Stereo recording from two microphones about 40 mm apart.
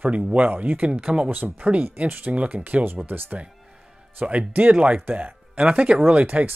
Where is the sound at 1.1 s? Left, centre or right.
Right.